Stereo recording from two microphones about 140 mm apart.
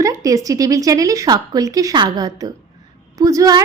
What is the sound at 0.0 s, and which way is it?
A woman's voice, 25° right (ahead or behind).